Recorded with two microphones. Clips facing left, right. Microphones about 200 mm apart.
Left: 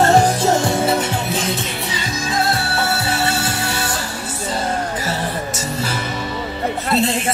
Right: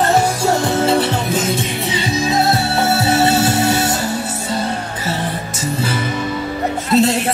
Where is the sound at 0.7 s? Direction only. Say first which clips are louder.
Right 3 dB; 25° right (ahead or behind).